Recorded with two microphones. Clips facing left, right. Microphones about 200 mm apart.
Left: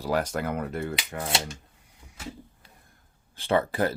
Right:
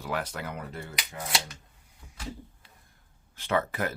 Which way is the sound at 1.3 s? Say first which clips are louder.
Left 3 dB; 25° left (ahead or behind).